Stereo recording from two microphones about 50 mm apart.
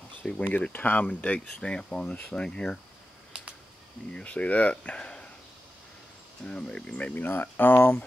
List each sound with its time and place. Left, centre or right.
0.2 s speech: left
0.7 s speech: left
1.6 s speech: centre
2.1 s speech: left
2.4 s speech: centre
3.3 s a sound: right
4.1 s speech: left
6.4 s speech: left
7.2 s speech: left